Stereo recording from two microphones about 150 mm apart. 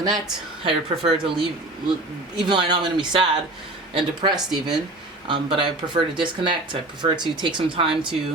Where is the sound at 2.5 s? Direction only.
30° right (ahead or behind).